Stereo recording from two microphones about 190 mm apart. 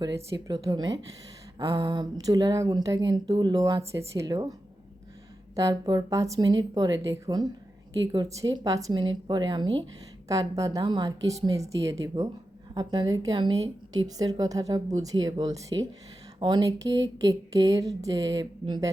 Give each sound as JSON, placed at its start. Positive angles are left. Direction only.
{"t": 0.3, "sound": "speech", "side_deg": -20}
{"t": 5.5, "sound": "a woman's voice", "side_deg": -20}